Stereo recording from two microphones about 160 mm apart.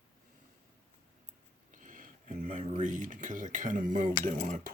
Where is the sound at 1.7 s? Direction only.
55° right (ahead or behind).